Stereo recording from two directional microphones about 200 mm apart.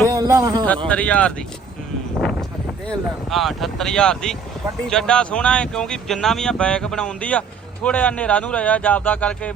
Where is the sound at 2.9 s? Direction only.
Centre (ahead or behind).